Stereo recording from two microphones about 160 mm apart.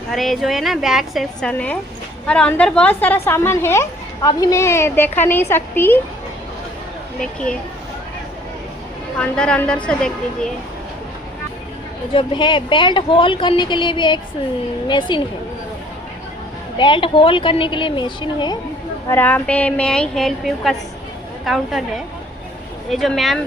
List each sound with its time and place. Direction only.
0.1 s a woman's voice: centre (ahead or behind)
7.2 s a woman's voice: 5° left (ahead or behind)
9.1 s a woman's voice: 5° left (ahead or behind)
12.1 s speech: 30° left (ahead or behind)
16.7 s speech: 30° left (ahead or behind)
19.0 s a woman's voice: 10° left (ahead or behind)